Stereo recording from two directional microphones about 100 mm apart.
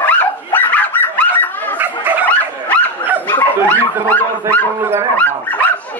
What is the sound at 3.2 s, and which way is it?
Dog, 20° left (ahead or behind).